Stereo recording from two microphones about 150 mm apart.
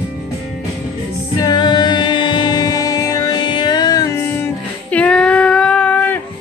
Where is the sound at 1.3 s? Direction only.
30° left (ahead or behind).